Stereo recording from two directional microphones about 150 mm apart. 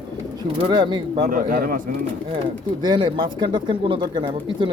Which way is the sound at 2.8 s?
30° right (ahead or behind).